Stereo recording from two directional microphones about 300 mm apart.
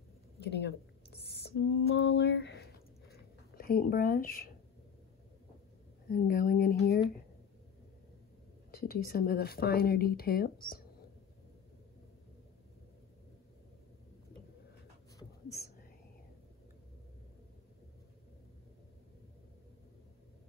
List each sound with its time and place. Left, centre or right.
0.4 s a sound: left
6.0 s speech: left
8.8 s speech: left